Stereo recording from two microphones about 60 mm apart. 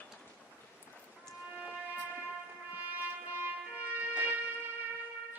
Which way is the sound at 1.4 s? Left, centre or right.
Right.